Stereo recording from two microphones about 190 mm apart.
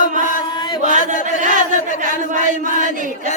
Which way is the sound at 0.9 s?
40° right (ahead or behind).